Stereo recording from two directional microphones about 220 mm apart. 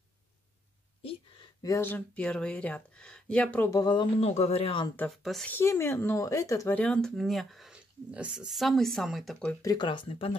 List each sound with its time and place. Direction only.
1.6 s speech: 10° left (ahead or behind)
4.9 s speech: centre (ahead or behind); by 10.3 s 25° left (ahead or behind)